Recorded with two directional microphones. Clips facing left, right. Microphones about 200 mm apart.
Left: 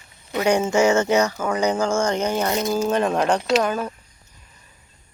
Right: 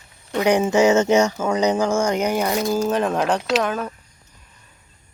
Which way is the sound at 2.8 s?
Centre (ahead or behind).